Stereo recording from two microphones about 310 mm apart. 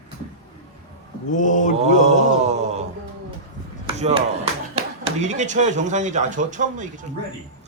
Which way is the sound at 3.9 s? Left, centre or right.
Centre.